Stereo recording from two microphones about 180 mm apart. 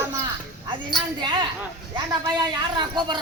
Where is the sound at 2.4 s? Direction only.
25° right (ahead or behind).